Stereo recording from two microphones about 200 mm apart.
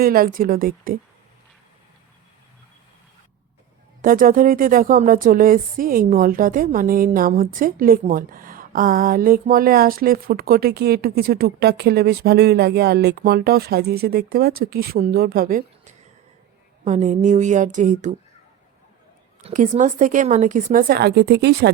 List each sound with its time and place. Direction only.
0.0 s speech: 45° right (ahead or behind)
4.0 s a woman's voice: 45° right (ahead or behind)
19.5 s a woman's voice: 35° right (ahead or behind); by 21.7 s 55° right (ahead or behind)